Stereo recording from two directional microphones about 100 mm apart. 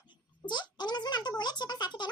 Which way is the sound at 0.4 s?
50° left (ahead or behind).